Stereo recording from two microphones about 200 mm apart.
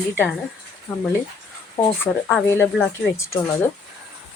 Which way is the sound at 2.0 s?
10° left (ahead or behind).